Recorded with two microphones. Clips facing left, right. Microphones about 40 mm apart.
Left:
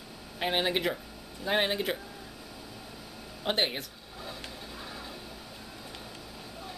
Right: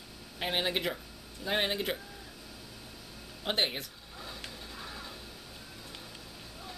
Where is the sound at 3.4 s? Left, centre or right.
Centre.